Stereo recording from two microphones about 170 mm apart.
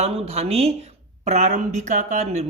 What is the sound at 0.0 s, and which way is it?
Speech, 35° right (ahead or behind).